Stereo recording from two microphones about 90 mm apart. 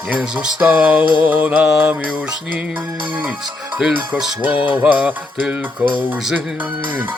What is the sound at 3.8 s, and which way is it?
Music, 5° right (ahead or behind).